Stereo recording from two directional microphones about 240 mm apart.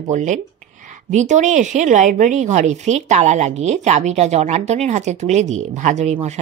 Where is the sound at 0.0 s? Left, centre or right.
Right.